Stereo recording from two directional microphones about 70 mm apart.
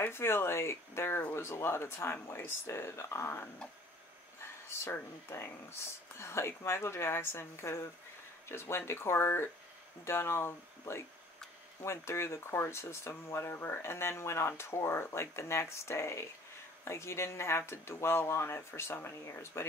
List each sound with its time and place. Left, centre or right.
0.0 s speech: left
4.6 s speech: left